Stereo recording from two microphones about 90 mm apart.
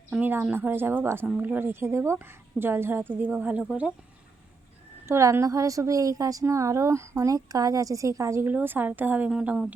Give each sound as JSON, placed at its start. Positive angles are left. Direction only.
{"t": 0.1, "sound": "a woman's voice", "side_deg": -20}
{"t": 5.0, "sound": "a woman's voice", "side_deg": -30}
{"t": 8.4, "sound": "a woman's voice", "side_deg": -20}